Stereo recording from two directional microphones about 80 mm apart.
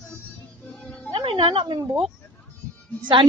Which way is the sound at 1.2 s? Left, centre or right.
Right.